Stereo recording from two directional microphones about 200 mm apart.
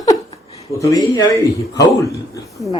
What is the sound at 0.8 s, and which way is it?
Speech, 15° left (ahead or behind).